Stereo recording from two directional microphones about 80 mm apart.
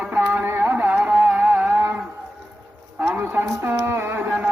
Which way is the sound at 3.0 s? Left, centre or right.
Right.